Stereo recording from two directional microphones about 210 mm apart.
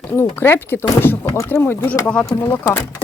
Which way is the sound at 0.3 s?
10° left (ahead or behind).